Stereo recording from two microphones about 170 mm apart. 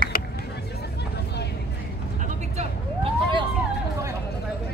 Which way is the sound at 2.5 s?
35° right (ahead or behind).